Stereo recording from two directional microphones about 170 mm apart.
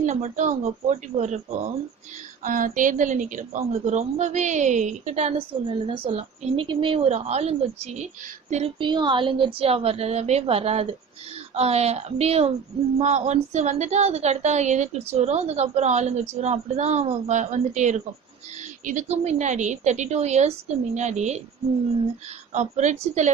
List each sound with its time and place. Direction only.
0.0 s a woman's voice: 45° right (ahead or behind)
8.4 s child singing: 40° right (ahead or behind)
8.8 s a woman's voice: 25° right (ahead or behind)
22.5 s speech: 45° right (ahead or behind)